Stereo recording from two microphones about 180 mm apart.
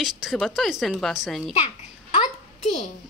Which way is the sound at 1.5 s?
30° left (ahead or behind).